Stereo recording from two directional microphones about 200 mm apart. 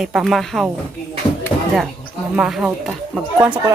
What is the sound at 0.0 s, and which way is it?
Speech, centre (ahead or behind).